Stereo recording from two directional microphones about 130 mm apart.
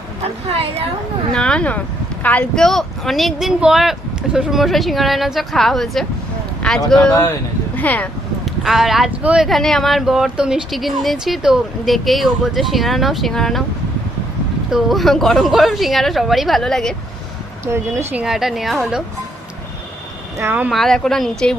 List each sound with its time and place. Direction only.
1.3 s speech: 5° left (ahead or behind)
2.6 s speech: centre (ahead or behind)
8.4 s speech: centre (ahead or behind)
14.7 s speech: centre (ahead or behind)
17.7 s speech: 20° right (ahead or behind); by 19.0 s 5° right (ahead or behind)
20.4 s speech: 15° right (ahead or behind)
20.7 s speech: centre (ahead or behind)